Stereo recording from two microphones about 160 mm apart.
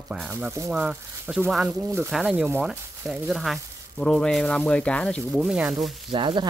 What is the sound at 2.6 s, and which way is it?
Speech, centre (ahead or behind).